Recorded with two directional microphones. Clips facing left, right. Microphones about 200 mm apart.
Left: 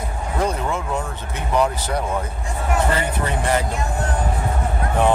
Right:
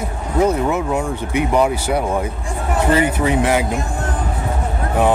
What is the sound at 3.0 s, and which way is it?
Speech, 10° right (ahead or behind).